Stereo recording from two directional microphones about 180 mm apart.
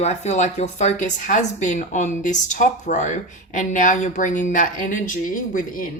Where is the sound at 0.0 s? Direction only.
40° left (ahead or behind).